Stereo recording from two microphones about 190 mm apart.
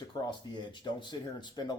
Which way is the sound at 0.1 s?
25° left (ahead or behind).